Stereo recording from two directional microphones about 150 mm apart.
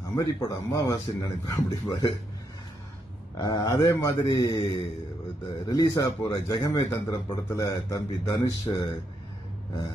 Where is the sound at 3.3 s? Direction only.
25° left (ahead or behind).